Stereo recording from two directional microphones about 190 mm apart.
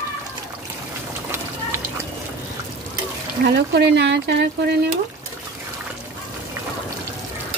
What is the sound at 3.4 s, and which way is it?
Speech, 60° right (ahead or behind).